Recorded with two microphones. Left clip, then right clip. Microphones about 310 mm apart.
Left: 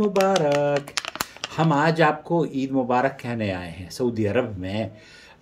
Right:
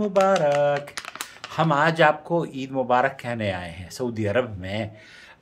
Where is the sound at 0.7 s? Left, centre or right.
Left.